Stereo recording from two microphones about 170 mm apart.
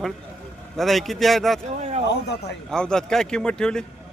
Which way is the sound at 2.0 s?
80° left.